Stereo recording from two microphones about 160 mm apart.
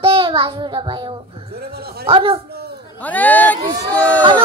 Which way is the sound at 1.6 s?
80° right.